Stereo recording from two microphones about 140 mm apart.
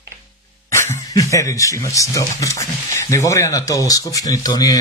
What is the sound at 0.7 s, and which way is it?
Speech, 20° left (ahead or behind).